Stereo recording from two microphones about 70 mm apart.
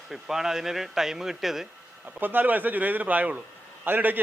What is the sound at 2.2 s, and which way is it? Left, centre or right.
A man's voice, right.